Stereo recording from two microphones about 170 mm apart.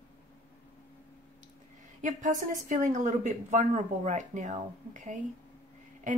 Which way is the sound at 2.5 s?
50° right (ahead or behind).